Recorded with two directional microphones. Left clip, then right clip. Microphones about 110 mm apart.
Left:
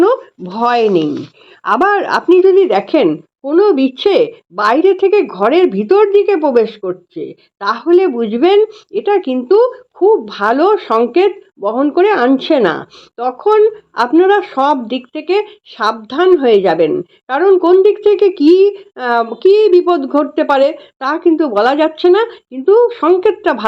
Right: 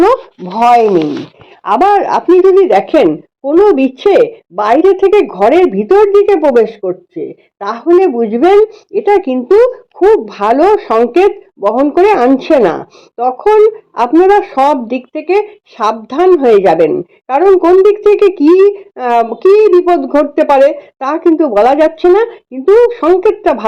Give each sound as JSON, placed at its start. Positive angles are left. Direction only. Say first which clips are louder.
{"t": 0.4, "sound": "speech", "louder": "right 6 dB", "side_deg": 45}
{"t": 1.7, "sound": "speech", "louder": "right 4 dB", "side_deg": 30}
{"t": 2.0, "sound": "a woman's voice", "louder": "right 2 dB", "side_deg": 5}